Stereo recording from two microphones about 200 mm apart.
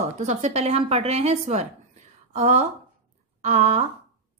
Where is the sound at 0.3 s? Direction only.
35° right (ahead or behind).